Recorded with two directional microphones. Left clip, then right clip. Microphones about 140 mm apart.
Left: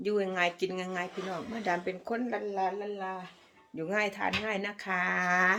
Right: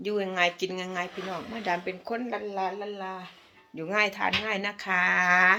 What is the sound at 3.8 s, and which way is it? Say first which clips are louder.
Speech: right 4 dB; 30° left (ahead or behind).